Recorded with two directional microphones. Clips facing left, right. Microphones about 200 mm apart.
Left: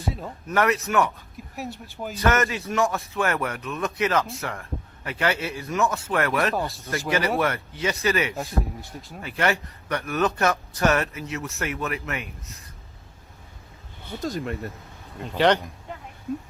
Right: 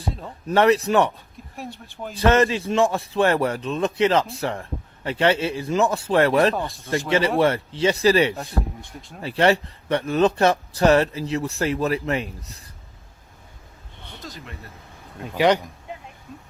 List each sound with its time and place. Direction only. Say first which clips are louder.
0.4 s speech: right 6 dB; 30° right (ahead or behind)
2.1 s a man's voice: right 5 dB; 30° right (ahead or behind)
9.0 s speech: left 1 dB; 5° left (ahead or behind)
9.2 s speech: right 6 dB; 30° right (ahead or behind)
14.2 s speech: left 11 dB; 50° left (ahead or behind)
15.2 s speech: right 1 dB; 10° right (ahead or behind)